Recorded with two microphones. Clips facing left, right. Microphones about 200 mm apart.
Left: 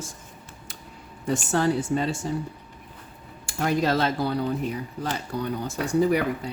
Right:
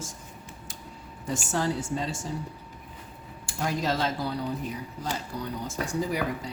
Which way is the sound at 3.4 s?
65° left (ahead or behind).